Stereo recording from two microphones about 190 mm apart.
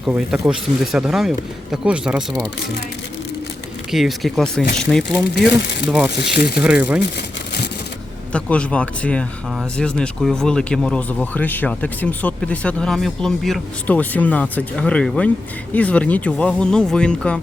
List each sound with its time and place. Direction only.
0.0 s speech: 5° right (ahead or behind)
3.9 s speech: centre (ahead or behind)
5.3 s speech: 60° left (ahead or behind)
6.6 s speech: 5° right (ahead or behind)
8.3 s speech: 5° left (ahead or behind)